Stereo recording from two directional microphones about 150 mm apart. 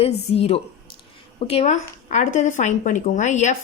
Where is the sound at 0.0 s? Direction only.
40° left (ahead or behind).